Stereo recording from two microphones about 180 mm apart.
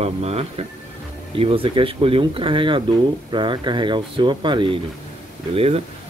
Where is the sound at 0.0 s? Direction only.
35° right (ahead or behind).